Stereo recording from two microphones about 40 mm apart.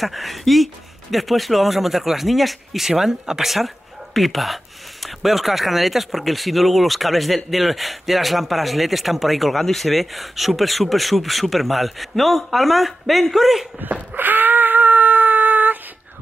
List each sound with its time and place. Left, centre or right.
0.0 s speech: centre
3.4 s speech: centre
14.1 s wail: right